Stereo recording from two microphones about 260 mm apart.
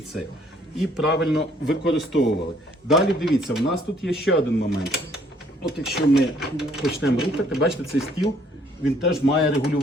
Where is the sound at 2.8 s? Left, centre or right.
Centre.